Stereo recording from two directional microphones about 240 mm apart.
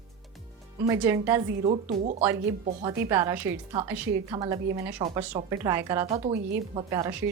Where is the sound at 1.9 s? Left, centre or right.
Right.